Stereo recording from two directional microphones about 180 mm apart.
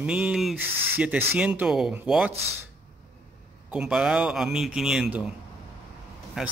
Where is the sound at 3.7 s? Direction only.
5° right (ahead or behind).